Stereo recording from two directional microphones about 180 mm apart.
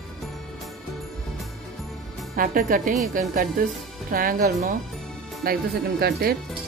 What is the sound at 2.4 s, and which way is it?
Speech, 50° right (ahead or behind).